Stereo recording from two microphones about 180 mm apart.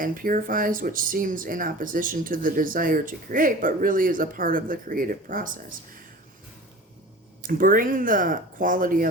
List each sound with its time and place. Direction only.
0.0 s speech: 50° right (ahead or behind)
7.4 s speech: 50° right (ahead or behind)